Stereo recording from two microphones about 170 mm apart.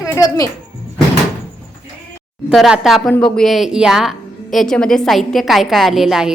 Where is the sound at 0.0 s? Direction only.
20° left (ahead or behind).